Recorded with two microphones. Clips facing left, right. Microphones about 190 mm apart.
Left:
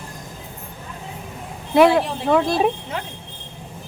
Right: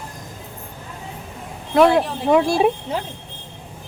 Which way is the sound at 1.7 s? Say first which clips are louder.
Even; 5° left (ahead or behind).